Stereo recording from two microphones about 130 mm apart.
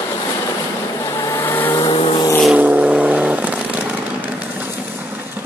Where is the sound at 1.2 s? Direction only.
25° left (ahead or behind).